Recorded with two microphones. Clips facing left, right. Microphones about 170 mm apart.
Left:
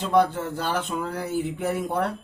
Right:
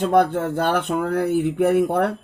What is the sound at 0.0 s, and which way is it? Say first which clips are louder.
Speech: right 4 dB; 55° right (ahead or behind).